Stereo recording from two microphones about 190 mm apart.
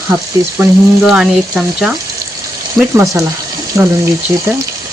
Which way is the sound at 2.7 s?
15° right (ahead or behind).